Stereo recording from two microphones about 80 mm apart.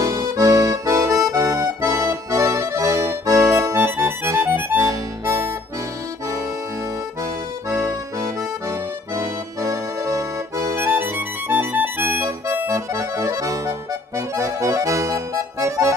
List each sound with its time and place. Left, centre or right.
0.0 s accordion: right
4.7 s music: right
7.7 s accordion: right